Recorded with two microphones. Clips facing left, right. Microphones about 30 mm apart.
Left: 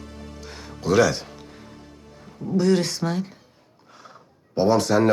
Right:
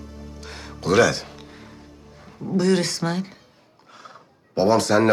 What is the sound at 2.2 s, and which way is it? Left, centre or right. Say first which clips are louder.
Speech: even; centre.